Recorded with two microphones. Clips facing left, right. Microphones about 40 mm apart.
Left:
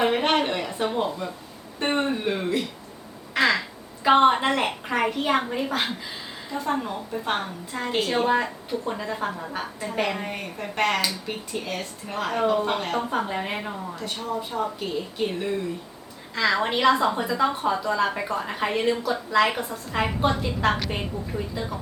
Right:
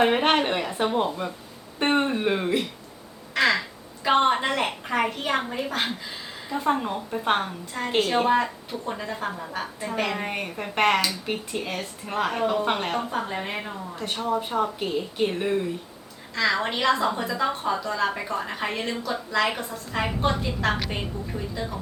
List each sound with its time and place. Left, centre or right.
0.0 s a woman's voice: centre
3.3 s quack: centre
4.0 s a woman's voice: centre
6.7 s a woman's voice: centre
10.2 s speech: right
11.7 s a woman's voice: centre
12.1 s a woman's voice: centre
13.2 s a woman's voice: centre
13.9 s speech: right
14.6 s speech: right
16.3 s a woman's voice: centre